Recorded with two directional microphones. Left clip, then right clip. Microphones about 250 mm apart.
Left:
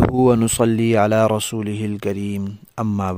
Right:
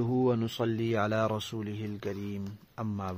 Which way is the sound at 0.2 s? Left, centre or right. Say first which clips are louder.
Left 14 dB; left.